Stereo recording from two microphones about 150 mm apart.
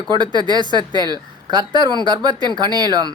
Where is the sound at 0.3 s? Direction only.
30° right (ahead or behind).